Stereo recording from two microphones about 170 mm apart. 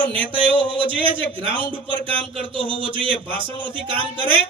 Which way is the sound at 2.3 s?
30° right (ahead or behind).